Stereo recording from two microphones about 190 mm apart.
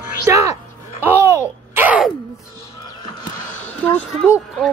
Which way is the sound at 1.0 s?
10° right (ahead or behind).